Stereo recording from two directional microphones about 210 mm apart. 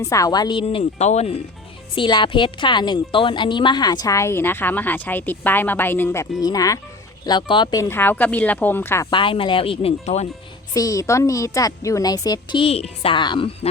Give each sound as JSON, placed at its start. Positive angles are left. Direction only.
{"t": 0.0, "sound": "a woman's voice", "side_deg": 15}
{"t": 10.8, "sound": "a woman's voice", "side_deg": 15}